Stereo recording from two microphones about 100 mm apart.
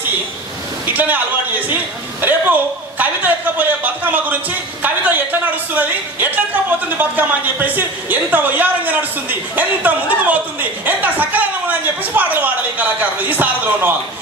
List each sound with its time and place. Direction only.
0.8 s a man's voice: 15° right (ahead or behind)
2.2 s a man's voice: 15° right (ahead or behind)